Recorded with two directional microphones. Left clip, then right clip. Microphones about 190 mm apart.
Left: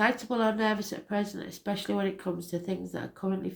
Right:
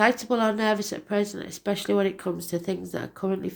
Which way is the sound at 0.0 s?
45° right (ahead or behind).